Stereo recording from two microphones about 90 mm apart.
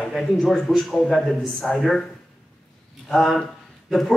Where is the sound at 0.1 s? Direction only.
5° left (ahead or behind).